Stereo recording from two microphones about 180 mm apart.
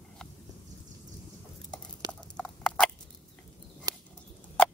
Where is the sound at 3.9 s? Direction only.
20° right (ahead or behind).